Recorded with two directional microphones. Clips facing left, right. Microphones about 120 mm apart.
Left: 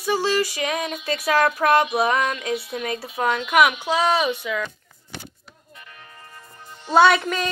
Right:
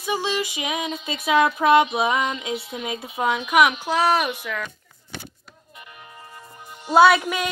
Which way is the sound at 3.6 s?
Centre (ahead or behind).